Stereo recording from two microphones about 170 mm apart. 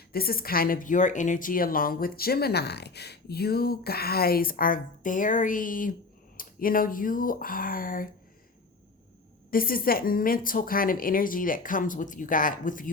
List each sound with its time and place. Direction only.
0.1 s a woman's voice: 60° left (ahead or behind)
9.5 s a woman's voice: 55° left (ahead or behind)